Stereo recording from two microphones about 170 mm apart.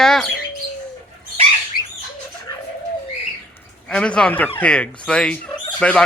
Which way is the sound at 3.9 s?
5° left (ahead or behind).